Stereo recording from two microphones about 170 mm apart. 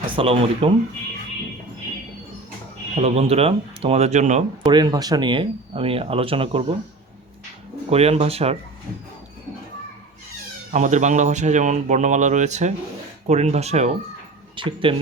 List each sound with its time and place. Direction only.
0.0 s speech: 30° right (ahead or behind)
2.9 s speech: 35° right (ahead or behind)
4.6 s speech: 25° right (ahead or behind)
7.9 s speech: 35° right (ahead or behind)
10.7 s speech: 45° right (ahead or behind)
14.5 s speech: 30° right (ahead or behind)